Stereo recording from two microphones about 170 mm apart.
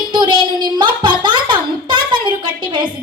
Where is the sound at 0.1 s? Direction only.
25° right (ahead or behind).